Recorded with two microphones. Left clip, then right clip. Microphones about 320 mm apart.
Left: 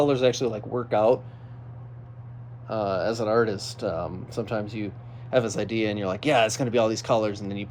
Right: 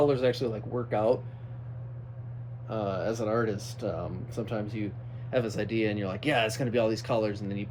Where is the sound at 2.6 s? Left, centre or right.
Left.